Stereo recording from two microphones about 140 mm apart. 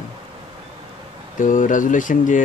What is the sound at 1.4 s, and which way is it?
Speech, 65° left (ahead or behind).